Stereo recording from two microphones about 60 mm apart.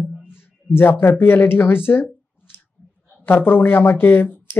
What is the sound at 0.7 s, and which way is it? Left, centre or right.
Speech, left.